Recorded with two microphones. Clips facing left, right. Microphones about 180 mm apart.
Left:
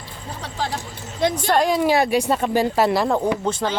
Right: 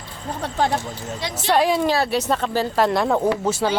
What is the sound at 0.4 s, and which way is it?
Speech, 55° right (ahead or behind).